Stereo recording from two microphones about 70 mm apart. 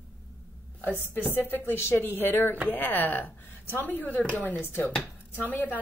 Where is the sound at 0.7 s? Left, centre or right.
Left.